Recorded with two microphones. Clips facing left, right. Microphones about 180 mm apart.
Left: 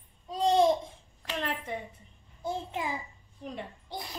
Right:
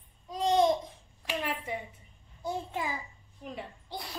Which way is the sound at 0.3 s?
30° left (ahead or behind).